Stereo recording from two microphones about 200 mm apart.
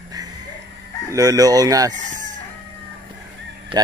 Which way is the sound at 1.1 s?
20° right (ahead or behind).